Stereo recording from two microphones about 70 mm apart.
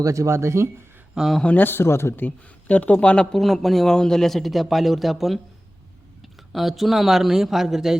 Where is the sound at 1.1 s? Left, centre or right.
Centre.